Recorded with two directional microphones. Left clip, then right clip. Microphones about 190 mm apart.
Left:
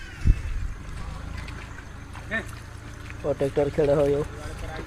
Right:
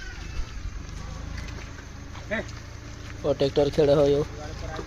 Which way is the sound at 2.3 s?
45° right (ahead or behind).